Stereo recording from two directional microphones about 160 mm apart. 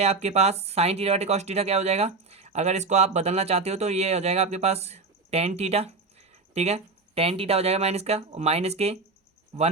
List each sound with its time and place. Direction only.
0.0 s speech: 45° right (ahead or behind)